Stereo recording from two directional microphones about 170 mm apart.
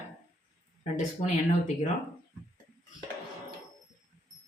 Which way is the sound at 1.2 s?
35° left (ahead or behind).